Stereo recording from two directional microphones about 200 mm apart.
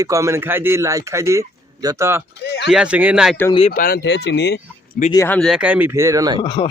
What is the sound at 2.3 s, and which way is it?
Speech, 60° left (ahead or behind).